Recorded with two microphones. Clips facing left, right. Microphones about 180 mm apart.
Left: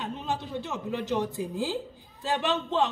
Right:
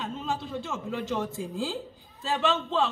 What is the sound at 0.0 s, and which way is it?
A man's voice, 15° left (ahead or behind).